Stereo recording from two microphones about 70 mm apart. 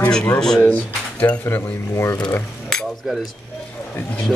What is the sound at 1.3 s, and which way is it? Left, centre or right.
Speech, centre.